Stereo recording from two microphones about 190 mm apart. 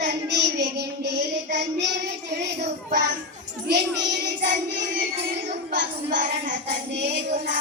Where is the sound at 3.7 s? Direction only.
65° right (ahead or behind).